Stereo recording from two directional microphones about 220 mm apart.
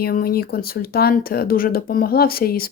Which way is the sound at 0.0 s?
40° left (ahead or behind).